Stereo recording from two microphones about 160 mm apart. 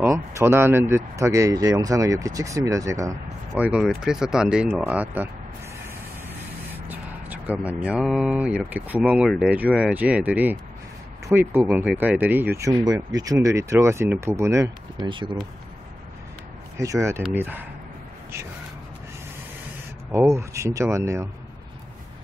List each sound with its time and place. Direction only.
0.0 s speech: 15° right (ahead or behind)
3.6 s speech: 5° right (ahead or behind)
6.9 s speech: 10° right (ahead or behind)
11.6 s speech: 5° right (ahead or behind)
15.0 s speech: 30° right (ahead or behind)
16.7 s speech: 20° right (ahead or behind)
20.3 s speech: 20° right (ahead or behind)